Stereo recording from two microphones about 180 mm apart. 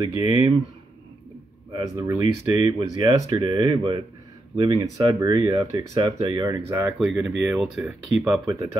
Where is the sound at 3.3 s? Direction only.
30° right (ahead or behind).